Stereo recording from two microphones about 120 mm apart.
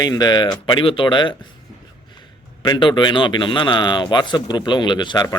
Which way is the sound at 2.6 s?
40° left (ahead or behind).